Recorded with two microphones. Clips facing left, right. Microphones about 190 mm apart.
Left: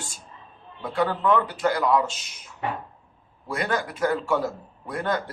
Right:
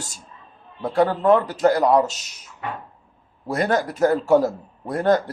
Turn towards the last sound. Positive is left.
turn(degrees=-40)  # may be behind; listen again after turning